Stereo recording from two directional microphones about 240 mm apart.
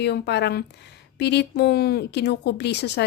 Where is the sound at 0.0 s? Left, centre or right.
Left.